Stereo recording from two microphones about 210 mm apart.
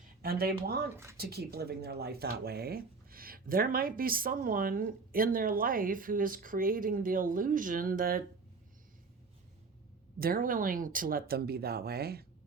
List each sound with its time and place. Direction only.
0.2 s speech: 45° right (ahead or behind)
10.2 s speech: 45° right (ahead or behind)